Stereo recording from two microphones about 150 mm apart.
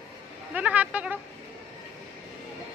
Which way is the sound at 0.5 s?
10° right (ahead or behind).